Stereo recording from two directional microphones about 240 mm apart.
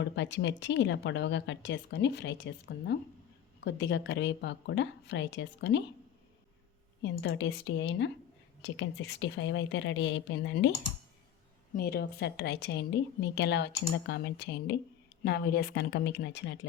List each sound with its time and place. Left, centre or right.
0.0 s a woman's voice: left
7.0 s a woman's voice: left
11.7 s a woman's voice: left